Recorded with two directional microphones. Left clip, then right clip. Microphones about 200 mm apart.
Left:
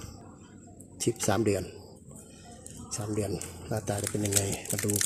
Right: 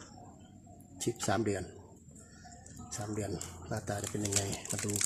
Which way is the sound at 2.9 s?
5° left (ahead or behind).